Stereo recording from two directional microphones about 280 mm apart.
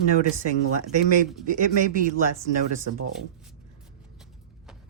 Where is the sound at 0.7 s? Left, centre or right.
Right.